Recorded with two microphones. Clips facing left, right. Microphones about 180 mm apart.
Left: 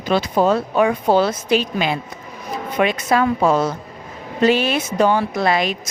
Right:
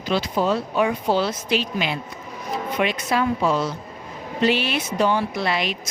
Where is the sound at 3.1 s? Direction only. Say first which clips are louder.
Left 5 dB; 50° left (ahead or behind).